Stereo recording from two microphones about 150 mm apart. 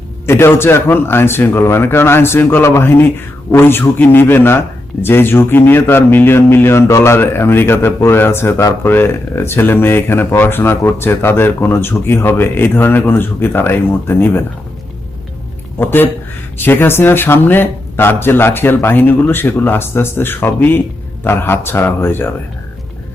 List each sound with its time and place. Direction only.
0.3 s speech: 15° left (ahead or behind)
15.8 s speech: 15° left (ahead or behind)